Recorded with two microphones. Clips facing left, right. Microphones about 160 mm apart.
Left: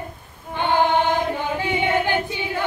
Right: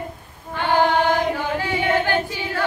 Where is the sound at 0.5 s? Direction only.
20° left (ahead or behind).